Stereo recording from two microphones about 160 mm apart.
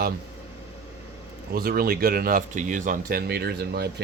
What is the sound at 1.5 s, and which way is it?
Speech, 70° right (ahead or behind).